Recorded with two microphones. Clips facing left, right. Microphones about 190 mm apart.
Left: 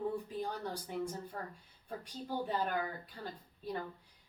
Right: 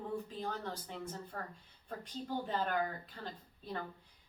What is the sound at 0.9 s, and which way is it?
Speech, 15° left (ahead or behind).